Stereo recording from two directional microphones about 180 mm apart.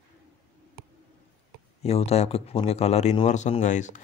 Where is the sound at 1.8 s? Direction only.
35° left (ahead or behind).